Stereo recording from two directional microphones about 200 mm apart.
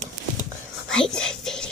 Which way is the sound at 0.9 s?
5° left (ahead or behind).